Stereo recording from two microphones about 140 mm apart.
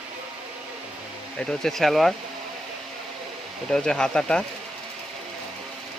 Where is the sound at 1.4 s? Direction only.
5° left (ahead or behind).